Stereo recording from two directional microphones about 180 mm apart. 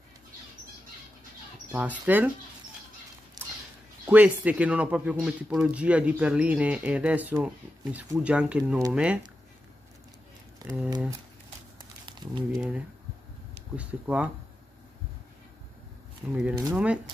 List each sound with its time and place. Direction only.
1.7 s speech: 10° right (ahead or behind)
3.4 s a sound: 20° right (ahead or behind)
4.0 s speech: 10° right (ahead or behind)
10.6 s speech: 5° right (ahead or behind)
11.8 s a sound: 25° right (ahead or behind)
12.5 s speech: 5° right (ahead or behind)
16.2 s speech: 10° right (ahead or behind)